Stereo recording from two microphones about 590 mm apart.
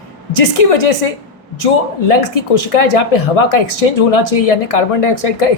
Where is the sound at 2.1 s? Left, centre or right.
Left.